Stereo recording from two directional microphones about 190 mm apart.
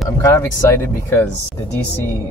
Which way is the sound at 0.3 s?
15° left (ahead or behind).